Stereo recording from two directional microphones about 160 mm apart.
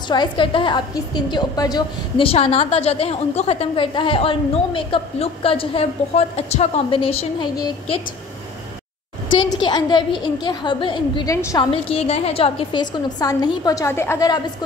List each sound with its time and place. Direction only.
0.1 s a woman's voice: 30° left (ahead or behind)
9.6 s a woman's voice: 25° left (ahead or behind)